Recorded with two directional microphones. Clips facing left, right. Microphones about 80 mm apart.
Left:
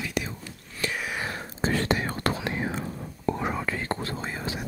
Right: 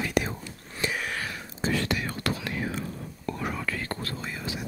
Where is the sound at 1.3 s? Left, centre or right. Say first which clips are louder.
Left 2 dB; left.